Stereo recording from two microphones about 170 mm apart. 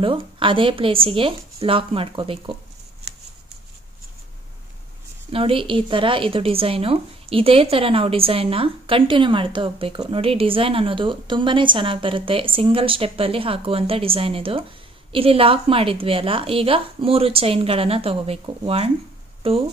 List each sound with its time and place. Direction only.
0.0 s speech: 30° right (ahead or behind)
5.3 s speech: 30° right (ahead or behind)